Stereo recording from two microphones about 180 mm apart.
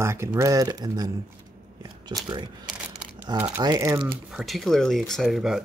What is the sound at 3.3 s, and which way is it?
Speech, 10° right (ahead or behind).